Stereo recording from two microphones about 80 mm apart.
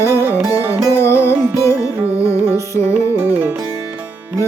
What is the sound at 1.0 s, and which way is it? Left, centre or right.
Music, left.